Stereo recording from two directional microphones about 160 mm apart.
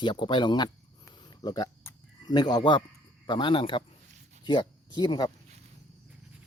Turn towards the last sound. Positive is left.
turn(degrees=25)  # may be behind; listen again after turning